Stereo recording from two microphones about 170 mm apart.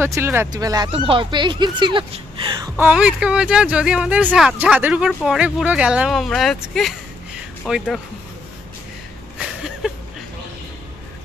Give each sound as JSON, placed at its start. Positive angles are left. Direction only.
{"t": 0.0, "sound": "speech", "side_deg": -15}
{"t": 2.8, "sound": "speech", "side_deg": -5}
{"t": 9.8, "sound": "a sound", "side_deg": -5}